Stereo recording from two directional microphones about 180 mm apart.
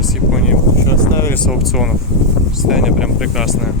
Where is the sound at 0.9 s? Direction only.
15° left (ahead or behind).